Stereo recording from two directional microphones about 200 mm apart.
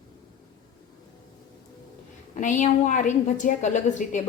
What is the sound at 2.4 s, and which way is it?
A woman's voice, 40° left (ahead or behind).